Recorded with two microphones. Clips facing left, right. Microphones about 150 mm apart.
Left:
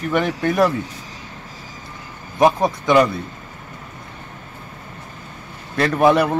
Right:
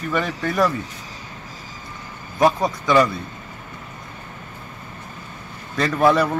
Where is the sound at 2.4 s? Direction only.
15° left (ahead or behind).